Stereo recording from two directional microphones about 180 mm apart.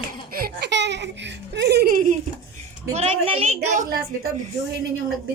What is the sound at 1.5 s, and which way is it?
Speech, 70° right (ahead or behind).